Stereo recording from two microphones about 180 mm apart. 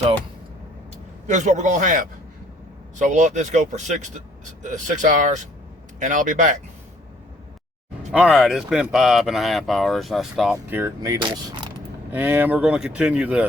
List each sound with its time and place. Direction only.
1.3 s speech: 40° right (ahead or behind)
3.0 s speech: 40° right (ahead or behind)
8.1 s speech: 5° right (ahead or behind); by 11.7 s 20° right (ahead or behind)
12.1 s speech: 10° right (ahead or behind)